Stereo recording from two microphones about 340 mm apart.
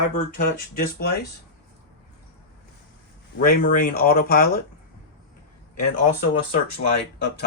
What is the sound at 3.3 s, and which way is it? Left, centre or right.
Speech, left.